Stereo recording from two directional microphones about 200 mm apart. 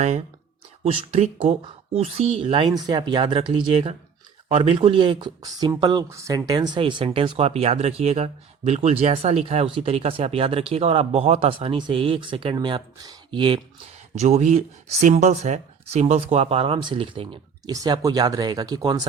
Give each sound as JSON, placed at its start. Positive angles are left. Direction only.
{"t": 0.9, "sound": "speech", "side_deg": -30}